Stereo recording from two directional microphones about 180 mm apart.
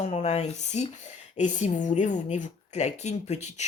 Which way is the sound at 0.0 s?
40° left (ahead or behind).